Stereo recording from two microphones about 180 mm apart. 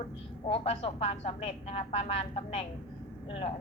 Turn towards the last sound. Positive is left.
turn(degrees=30)  # may be behind; listen again after turning